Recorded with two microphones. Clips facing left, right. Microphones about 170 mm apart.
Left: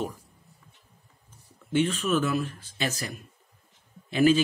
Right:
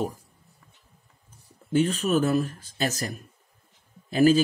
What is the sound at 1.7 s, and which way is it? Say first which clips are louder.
Speech: right 2 dB; 40° right (ahead or behind).